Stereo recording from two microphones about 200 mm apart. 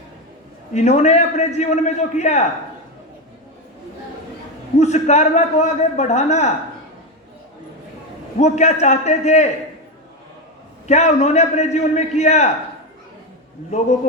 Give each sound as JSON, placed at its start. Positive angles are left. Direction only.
{"t": 0.7, "sound": "a man's voice", "side_deg": 35}
{"t": 4.8, "sound": "a man's voice", "side_deg": 35}
{"t": 8.4, "sound": "a man's voice", "side_deg": 35}
{"t": 10.8, "sound": "a man's voice", "side_deg": 35}